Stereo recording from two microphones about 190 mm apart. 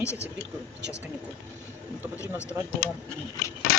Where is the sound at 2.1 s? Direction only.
15° left (ahead or behind).